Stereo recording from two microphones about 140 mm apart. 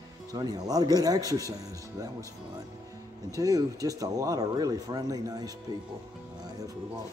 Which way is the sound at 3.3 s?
25° right (ahead or behind).